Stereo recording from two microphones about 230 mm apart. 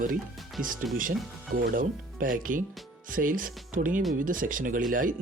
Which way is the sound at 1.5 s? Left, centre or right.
Right.